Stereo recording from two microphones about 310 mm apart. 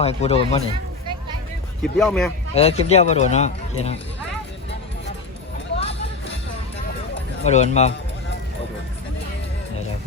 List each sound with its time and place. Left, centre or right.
0.0 s speech: centre
1.8 s speech: centre
2.6 s speech: centre
7.4 s speech: left